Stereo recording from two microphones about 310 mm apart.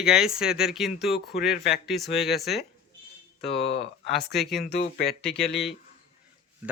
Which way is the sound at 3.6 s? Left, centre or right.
Centre.